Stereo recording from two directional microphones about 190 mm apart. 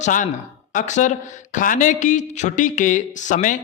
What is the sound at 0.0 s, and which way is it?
A man's voice, 40° left (ahead or behind).